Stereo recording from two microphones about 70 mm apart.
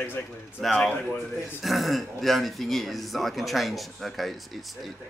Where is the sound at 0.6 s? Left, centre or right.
Centre.